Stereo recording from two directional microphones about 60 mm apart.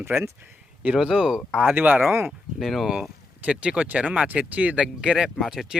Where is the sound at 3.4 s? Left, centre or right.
Centre.